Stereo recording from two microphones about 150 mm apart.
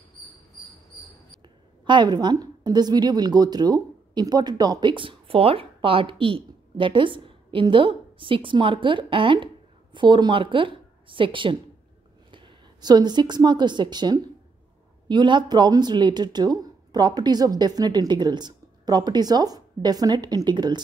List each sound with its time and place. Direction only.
1.9 s a woman's voice: 30° right (ahead or behind)